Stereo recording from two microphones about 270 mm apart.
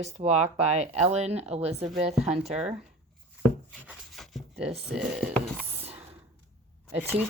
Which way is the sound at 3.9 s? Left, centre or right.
Centre.